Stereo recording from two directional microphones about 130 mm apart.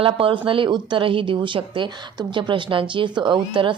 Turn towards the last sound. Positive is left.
turn(degrees=-40)  # may be behind; listen again after turning